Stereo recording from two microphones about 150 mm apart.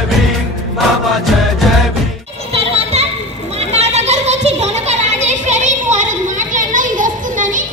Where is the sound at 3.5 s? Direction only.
45° right (ahead or behind).